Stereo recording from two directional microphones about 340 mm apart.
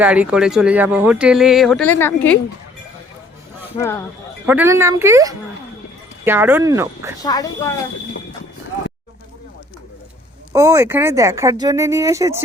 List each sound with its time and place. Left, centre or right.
0.0 s speech: centre
4.4 s speech: centre
7.2 s speech: centre
10.5 s speech: centre